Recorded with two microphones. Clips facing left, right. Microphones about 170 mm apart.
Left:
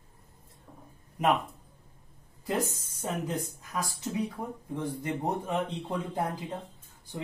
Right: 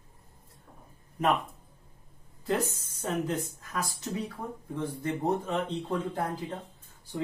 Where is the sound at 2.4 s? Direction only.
15° left (ahead or behind).